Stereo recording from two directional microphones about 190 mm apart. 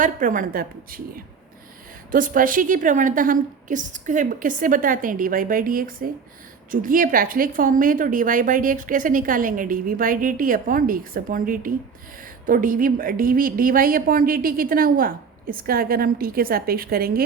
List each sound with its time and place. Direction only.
0.0 s a woman's voice: 45° right (ahead or behind)